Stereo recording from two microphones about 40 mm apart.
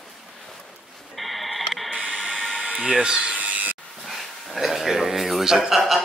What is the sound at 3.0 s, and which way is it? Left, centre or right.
Speech, centre.